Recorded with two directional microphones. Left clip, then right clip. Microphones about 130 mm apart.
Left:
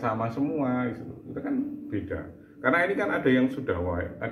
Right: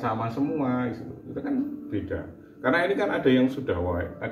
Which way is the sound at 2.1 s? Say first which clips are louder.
Right 2 dB; 15° right (ahead or behind).